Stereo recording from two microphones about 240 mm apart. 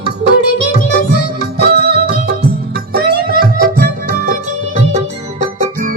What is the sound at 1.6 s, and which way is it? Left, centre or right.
Music, right.